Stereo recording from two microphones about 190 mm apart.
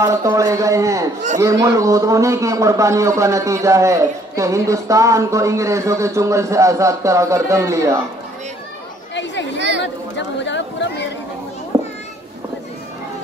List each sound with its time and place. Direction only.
0.0 s a man's voice: 15° right (ahead or behind)
9.8 s chatter: 70° left (ahead or behind)
11.7 s children playing: 15° right (ahead or behind)